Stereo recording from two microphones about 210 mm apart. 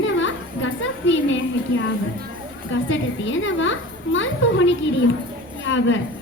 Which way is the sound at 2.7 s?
65° left (ahead or behind).